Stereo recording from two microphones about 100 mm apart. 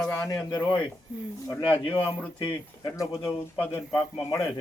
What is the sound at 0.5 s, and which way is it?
A man's voice, 45° left (ahead or behind).